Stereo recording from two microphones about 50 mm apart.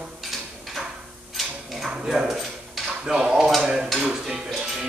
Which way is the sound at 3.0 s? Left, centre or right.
Centre.